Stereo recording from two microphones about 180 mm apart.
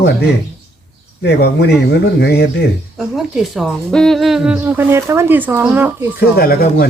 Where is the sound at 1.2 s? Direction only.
70° left (ahead or behind).